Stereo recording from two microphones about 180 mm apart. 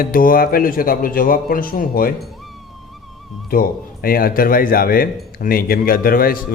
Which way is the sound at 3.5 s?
55° left (ahead or behind).